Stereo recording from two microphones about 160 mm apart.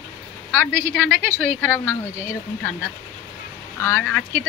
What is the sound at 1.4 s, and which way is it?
Speech, 10° left (ahead or behind).